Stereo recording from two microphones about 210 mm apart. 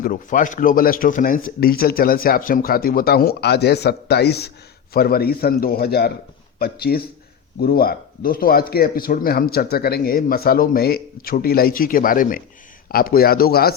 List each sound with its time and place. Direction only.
0.0 s speech: 40° left (ahead or behind)